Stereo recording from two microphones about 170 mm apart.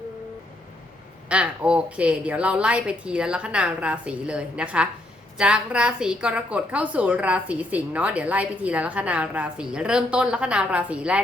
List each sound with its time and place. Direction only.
1.3 s a woman's voice: 5° right (ahead or behind)